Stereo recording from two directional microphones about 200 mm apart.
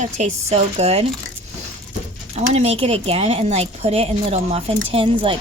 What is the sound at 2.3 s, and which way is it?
A woman's voice, 35° right (ahead or behind).